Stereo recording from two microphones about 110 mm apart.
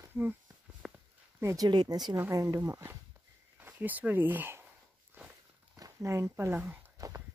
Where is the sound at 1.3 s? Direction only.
30° right (ahead or behind).